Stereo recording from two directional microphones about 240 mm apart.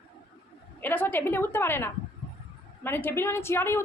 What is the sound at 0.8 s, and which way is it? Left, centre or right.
A woman's voice, centre.